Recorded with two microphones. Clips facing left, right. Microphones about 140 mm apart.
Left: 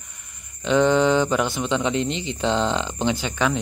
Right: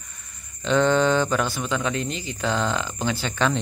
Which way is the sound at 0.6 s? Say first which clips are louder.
Left 2 dB; 15° left (ahead or behind).